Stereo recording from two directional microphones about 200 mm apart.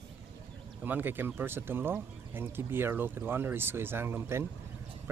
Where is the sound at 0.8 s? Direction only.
10° right (ahead or behind).